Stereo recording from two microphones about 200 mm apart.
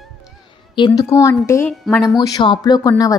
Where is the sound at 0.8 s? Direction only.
15° left (ahead or behind).